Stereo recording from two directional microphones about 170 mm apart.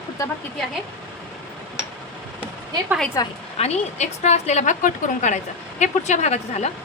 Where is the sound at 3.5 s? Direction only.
40° left (ahead or behind).